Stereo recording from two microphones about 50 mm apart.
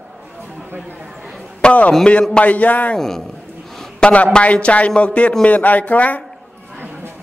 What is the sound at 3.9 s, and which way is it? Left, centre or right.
A man's voice, centre.